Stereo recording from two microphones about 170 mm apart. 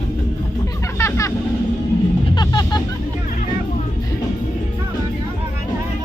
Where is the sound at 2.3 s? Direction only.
25° left (ahead or behind).